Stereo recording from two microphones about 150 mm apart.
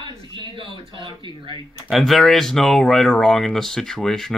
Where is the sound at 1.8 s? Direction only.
Centre (ahead or behind).